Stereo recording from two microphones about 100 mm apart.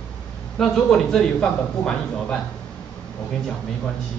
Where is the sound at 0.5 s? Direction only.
5° left (ahead or behind).